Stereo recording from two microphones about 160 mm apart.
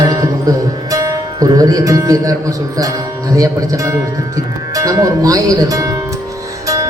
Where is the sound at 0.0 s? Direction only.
20° right (ahead or behind).